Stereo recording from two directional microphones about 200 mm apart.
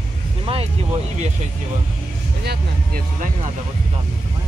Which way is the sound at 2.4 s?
45° right (ahead or behind).